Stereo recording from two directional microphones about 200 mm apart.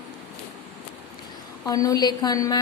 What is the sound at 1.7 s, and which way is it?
Speech, 15° left (ahead or behind).